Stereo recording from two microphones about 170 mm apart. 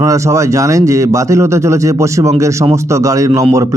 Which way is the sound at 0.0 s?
20° right (ahead or behind).